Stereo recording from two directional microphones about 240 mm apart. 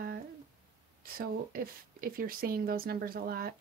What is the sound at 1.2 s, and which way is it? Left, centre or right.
Speech, right.